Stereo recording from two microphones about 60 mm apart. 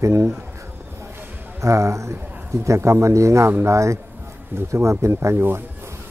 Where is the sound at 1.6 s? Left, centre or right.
Right.